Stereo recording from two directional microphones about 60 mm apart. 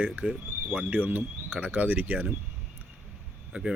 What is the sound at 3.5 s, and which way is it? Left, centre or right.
Speech, right.